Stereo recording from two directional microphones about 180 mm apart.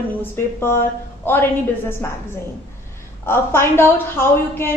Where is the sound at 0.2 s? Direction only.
15° left (ahead or behind).